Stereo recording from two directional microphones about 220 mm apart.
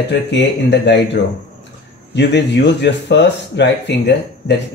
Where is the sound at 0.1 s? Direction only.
50° left (ahead or behind).